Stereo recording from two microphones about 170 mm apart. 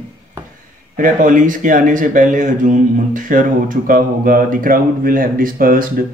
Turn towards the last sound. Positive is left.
turn(degrees=-55)  # may be behind; listen again after turning